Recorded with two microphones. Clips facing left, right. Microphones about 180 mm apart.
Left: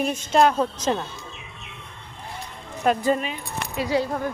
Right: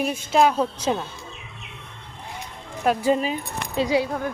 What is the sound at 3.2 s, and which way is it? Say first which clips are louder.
Speech: right 4 dB; 30° right (ahead or behind).